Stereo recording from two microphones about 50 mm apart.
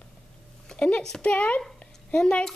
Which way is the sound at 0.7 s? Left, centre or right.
Left.